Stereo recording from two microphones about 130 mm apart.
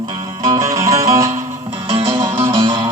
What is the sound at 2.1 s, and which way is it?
Music, 40° right (ahead or behind).